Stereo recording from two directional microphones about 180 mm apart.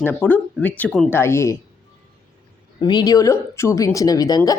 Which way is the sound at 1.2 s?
15° left (ahead or behind).